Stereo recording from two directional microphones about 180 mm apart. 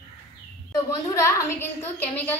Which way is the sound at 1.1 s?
15° left (ahead or behind).